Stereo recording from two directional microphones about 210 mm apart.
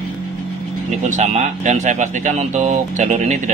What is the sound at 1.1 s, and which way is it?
Speech, 30° right (ahead or behind).